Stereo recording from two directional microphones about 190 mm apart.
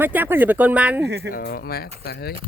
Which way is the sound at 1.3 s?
50° left (ahead or behind).